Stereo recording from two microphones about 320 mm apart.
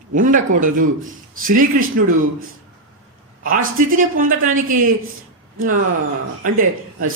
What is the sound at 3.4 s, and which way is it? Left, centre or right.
Speech, right.